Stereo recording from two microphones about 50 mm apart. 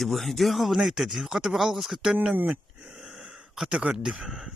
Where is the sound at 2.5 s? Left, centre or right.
Centre.